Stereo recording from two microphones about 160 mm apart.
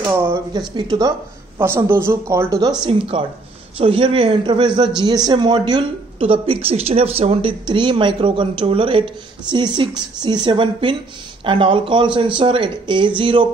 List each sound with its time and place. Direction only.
0.0 s speech: 15° right (ahead or behind)
0.5 s a woman's voice: 30° right (ahead or behind)
1.6 s speech: 15° right (ahead or behind)
2.8 s a woman's voice: 35° right (ahead or behind)